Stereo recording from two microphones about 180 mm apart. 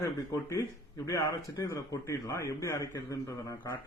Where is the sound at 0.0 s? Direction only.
15° left (ahead or behind).